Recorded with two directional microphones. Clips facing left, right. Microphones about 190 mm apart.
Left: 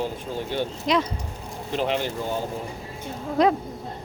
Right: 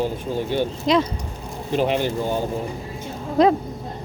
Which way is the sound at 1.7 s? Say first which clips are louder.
Right 4 dB; 10° right (ahead or behind).